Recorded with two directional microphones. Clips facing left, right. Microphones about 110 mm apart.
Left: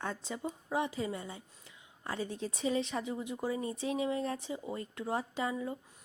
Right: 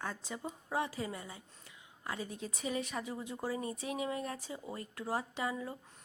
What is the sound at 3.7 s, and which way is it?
Speech, 30° left (ahead or behind).